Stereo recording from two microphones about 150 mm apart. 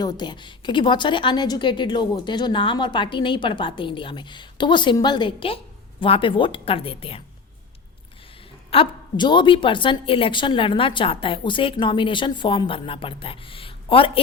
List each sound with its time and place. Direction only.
0.0 s a woman's voice: 25° left (ahead or behind)
8.7 s a woman's voice: 35° left (ahead or behind)